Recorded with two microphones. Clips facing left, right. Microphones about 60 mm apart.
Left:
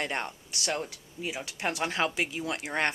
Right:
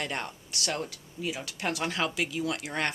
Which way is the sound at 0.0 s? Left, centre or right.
Left.